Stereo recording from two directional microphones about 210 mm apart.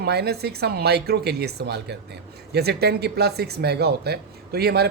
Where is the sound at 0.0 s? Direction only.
50° right (ahead or behind).